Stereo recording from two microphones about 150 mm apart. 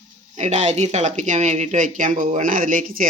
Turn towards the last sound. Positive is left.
turn(degrees=-65)  # may be behind; listen again after turning